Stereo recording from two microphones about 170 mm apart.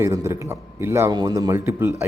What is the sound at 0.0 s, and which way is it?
Speech, 15° right (ahead or behind).